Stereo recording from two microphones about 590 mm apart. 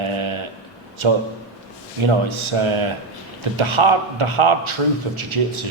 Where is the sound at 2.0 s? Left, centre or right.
Right.